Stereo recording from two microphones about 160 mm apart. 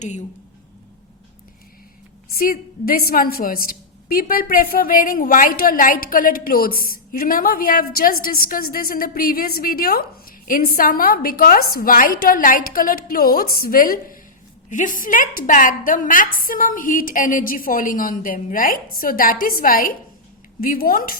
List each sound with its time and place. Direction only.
0.0 s a woman's voice: 50° left (ahead or behind)
2.4 s a woman's voice: 65° left (ahead or behind)